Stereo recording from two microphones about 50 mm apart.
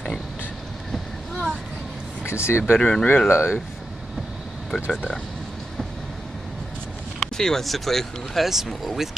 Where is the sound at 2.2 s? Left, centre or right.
Left.